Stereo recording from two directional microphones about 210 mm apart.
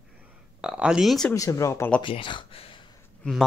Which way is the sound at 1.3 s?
15° left (ahead or behind).